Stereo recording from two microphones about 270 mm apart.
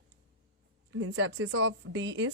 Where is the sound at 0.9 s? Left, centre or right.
Right.